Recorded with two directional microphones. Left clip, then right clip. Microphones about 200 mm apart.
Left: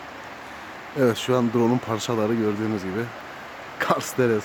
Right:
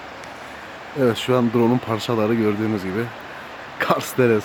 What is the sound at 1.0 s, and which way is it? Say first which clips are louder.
Speech: right 2 dB; centre (ahead or behind).